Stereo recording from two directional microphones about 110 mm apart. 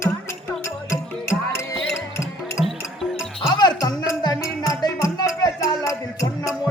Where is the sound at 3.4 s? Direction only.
40° left (ahead or behind).